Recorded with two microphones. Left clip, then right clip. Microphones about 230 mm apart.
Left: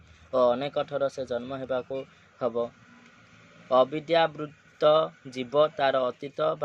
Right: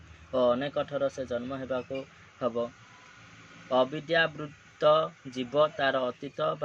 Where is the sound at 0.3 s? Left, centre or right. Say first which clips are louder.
Left 2 dB; left.